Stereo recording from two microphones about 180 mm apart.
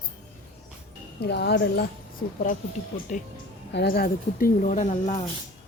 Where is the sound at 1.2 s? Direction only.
65° left (ahead or behind).